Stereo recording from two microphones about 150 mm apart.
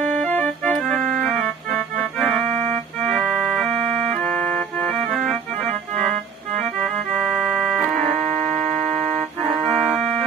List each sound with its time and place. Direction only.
0.0 s organ: 5° left (ahead or behind)
2.3 s organ: 50° right (ahead or behind)
3.1 s organ: 5° left (ahead or behind)
3.8 s accordion: 5° left (ahead or behind)
5.9 s organ: 5° left (ahead or behind)
6.8 s music: 5° left (ahead or behind)
7.3 s organ: 5° right (ahead or behind)
7.7 s organ: 5° left (ahead or behind)
9.6 s music: centre (ahead or behind)